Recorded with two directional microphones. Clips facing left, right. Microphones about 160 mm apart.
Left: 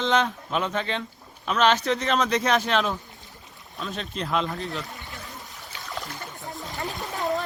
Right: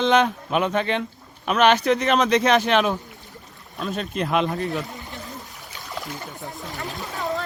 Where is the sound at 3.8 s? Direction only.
45° right (ahead or behind).